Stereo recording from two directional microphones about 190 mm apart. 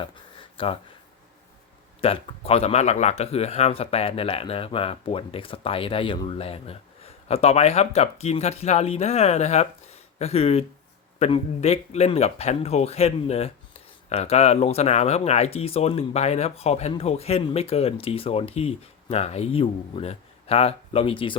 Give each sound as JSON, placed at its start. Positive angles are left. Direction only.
{"t": 0.5, "sound": "speech", "side_deg": 30}
{"t": 2.0, "sound": "a man's voice", "side_deg": 30}